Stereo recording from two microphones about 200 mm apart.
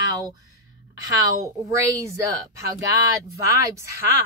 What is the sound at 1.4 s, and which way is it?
A woman's voice, 15° right (ahead or behind).